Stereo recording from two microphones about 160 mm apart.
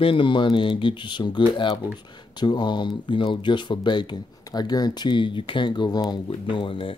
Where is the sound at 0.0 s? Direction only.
30° left (ahead or behind).